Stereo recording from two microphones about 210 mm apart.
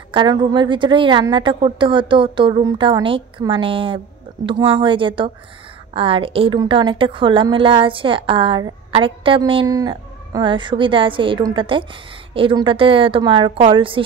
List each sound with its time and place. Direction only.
0.1 s a woman's voice: 20° right (ahead or behind)